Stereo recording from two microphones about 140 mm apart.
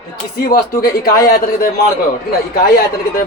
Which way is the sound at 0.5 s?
90° left.